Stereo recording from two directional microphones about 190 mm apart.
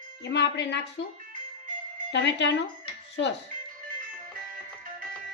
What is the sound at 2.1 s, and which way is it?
Speech, 65° left (ahead or behind).